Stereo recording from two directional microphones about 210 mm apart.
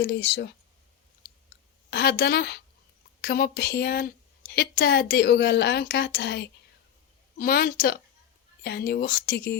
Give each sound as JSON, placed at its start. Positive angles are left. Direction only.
{"t": 0.0, "sound": "a woman's voice", "side_deg": 55}
{"t": 1.9, "sound": "a woman's voice", "side_deg": 50}